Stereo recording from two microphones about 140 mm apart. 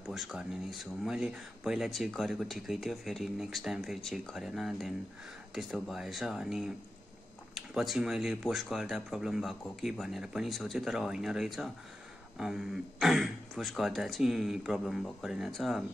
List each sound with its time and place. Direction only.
0.0 s speech: centre (ahead or behind)